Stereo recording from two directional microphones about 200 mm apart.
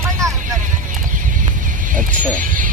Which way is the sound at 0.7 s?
40° right (ahead or behind).